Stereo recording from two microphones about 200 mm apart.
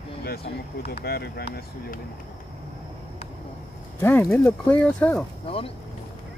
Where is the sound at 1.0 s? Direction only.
50° left (ahead or behind).